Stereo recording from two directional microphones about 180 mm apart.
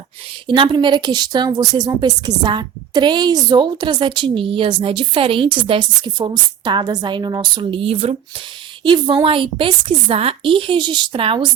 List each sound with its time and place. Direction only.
0.4 s a woman's voice: 25° right (ahead or behind)